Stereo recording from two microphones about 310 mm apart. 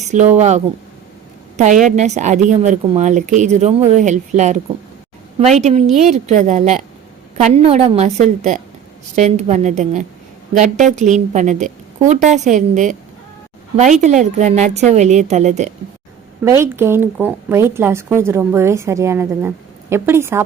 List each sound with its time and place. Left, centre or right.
0.3 s a woman's voice: right
16.4 s a woman's voice: centre